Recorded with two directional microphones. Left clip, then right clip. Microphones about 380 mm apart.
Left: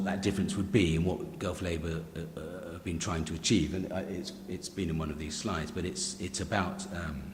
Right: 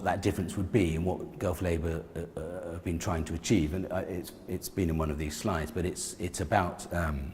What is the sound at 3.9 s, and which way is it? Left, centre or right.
Speech, right.